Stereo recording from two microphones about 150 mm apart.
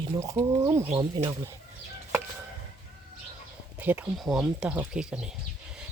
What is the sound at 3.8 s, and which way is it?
Speech, 10° right (ahead or behind).